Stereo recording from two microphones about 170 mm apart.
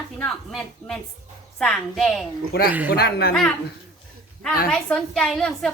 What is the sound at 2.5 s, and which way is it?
Speech, 70° left (ahead or behind).